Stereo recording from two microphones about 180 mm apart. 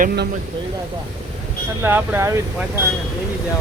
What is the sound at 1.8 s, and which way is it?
Speech, 10° right (ahead or behind).